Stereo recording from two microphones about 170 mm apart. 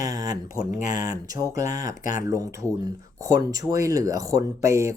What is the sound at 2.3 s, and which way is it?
Speech, 20° right (ahead or behind).